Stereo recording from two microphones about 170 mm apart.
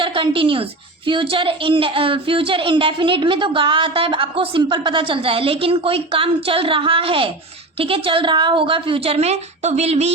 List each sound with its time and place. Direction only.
0.0 s a woman's voice: 30° right (ahead or behind)